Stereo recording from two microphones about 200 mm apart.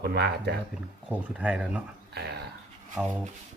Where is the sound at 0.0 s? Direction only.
55° right (ahead or behind).